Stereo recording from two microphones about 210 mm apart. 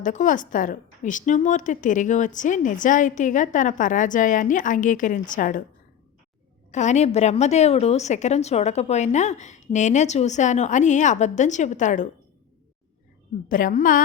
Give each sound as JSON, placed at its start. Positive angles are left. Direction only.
{"t": 0.0, "sound": "a woman's voice", "side_deg": 35}
{"t": 6.7, "sound": "a woman's voice", "side_deg": 35}
{"t": 13.5, "sound": "a woman's voice", "side_deg": 40}